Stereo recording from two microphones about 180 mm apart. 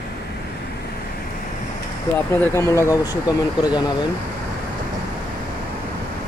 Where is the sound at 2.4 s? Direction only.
15° left (ahead or behind).